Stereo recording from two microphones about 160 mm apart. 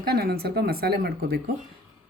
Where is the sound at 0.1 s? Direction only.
75° right (ahead or behind).